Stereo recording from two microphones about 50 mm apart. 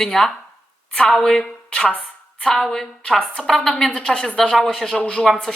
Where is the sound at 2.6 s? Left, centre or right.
Centre.